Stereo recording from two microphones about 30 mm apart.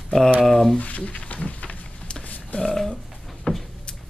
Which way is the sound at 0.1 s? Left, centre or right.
Left.